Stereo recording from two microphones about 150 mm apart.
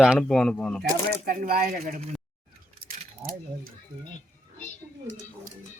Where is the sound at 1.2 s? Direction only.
75° right (ahead or behind).